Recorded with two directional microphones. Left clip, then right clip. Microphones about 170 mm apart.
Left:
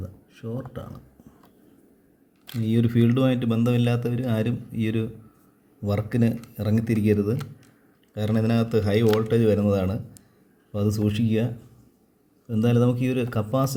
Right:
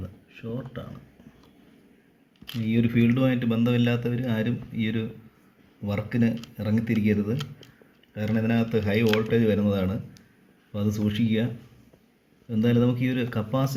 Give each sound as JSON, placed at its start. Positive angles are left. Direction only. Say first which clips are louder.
{"t": 2.6, "sound": "speech", "louder": "left 1 dB", "side_deg": 25}
{"t": 12.5, "sound": "speech", "louder": "left 1 dB", "side_deg": 20}